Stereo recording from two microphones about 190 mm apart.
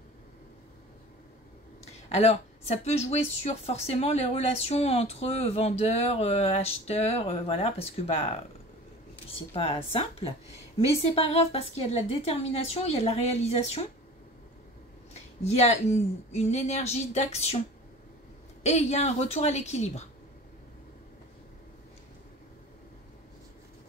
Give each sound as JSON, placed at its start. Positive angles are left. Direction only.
{"t": 2.0, "sound": "speech", "side_deg": 35}
{"t": 9.5, "sound": "speech", "side_deg": 30}
{"t": 15.1, "sound": "speech", "side_deg": 35}
{"t": 18.6, "sound": "speech", "side_deg": 35}